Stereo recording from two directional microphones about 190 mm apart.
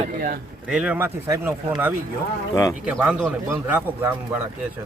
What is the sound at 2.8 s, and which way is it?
A man's voice, 5° right (ahead or behind).